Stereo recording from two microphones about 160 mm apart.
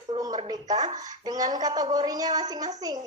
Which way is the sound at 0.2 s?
25° right (ahead or behind).